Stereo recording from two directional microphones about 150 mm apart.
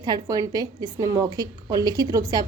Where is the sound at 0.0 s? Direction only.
25° right (ahead or behind).